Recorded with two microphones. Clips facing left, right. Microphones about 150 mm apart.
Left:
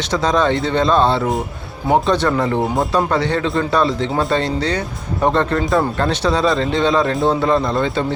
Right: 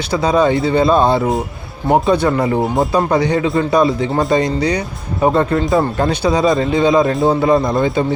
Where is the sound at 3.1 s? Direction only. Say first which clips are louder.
Right 3 dB; 15° right (ahead or behind).